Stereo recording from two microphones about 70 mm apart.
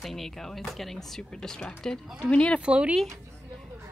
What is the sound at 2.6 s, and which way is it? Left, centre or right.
Speech, centre.